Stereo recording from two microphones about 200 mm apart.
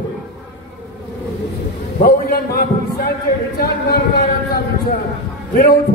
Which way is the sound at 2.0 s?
50° left (ahead or behind).